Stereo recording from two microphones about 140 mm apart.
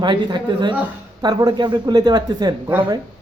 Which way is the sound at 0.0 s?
30° right (ahead or behind).